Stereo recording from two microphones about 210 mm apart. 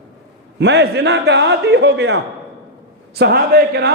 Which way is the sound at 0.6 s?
55° right (ahead or behind).